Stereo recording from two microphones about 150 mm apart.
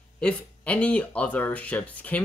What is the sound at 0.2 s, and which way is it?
Speech, 10° left (ahead or behind).